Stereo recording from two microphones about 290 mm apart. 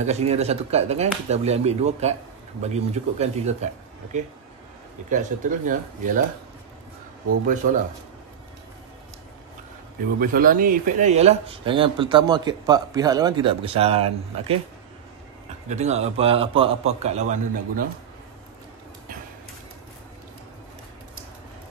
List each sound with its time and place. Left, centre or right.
0.0 s speech: right
10.1 s speech: right
15.7 s speech: right